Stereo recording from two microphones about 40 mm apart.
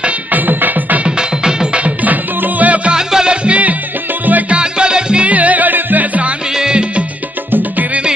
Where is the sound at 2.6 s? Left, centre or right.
Right.